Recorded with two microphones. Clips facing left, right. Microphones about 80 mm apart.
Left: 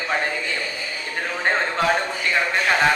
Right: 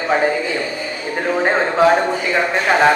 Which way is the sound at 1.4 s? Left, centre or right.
Centre.